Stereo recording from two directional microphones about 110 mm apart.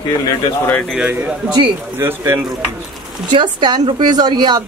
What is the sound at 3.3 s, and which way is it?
A woman's voice, 45° right (ahead or behind).